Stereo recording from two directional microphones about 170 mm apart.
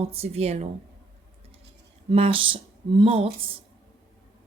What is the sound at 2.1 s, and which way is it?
A woman's voice, 35° right (ahead or behind).